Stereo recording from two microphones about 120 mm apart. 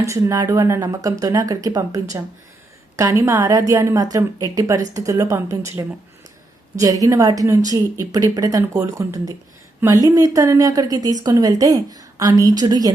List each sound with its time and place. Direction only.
0.0 s a woman's voice: 25° right (ahead or behind)